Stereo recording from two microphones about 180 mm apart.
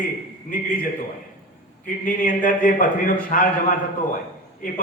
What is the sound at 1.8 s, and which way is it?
A man's voice, 50° left (ahead or behind).